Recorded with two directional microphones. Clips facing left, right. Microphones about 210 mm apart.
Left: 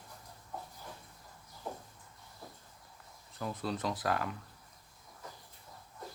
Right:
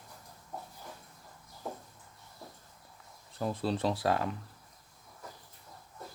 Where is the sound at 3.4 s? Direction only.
30° right (ahead or behind).